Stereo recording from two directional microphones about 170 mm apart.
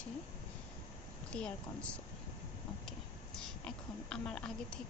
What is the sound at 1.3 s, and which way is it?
Speech, 5° left (ahead or behind).